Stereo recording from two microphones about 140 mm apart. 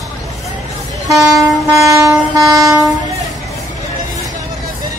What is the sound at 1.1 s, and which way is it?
Train, centre (ahead or behind).